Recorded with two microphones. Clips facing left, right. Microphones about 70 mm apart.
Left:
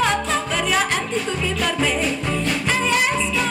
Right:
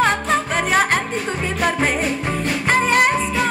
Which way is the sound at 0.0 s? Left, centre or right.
Right.